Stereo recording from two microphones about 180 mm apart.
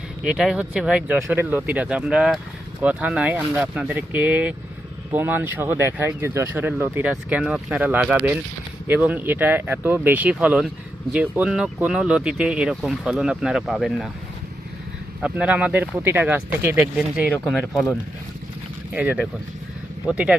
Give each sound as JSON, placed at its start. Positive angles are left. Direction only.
{"t": 0.3, "sound": "speech", "side_deg": -5}
{"t": 15.2, "sound": "speech", "side_deg": -5}
{"t": 18.9, "sound": "speech", "side_deg": -10}